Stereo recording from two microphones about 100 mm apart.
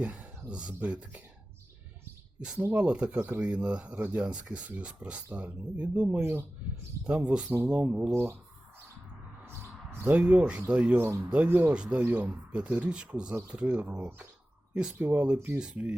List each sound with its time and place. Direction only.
0.0 s speech: 15° right (ahead or behind)
2.6 s speech: 15° right (ahead or behind)
6.1 s speech: 25° right (ahead or behind)
7.0 s speech: 10° right (ahead or behind)
8.1 s speech: 25° right (ahead or behind)
9.5 s a sound: 25° right (ahead or behind)
10.1 s speech: 10° right (ahead or behind)
11.0 s speech: 30° right (ahead or behind)
11.7 s speech: 10° right (ahead or behind)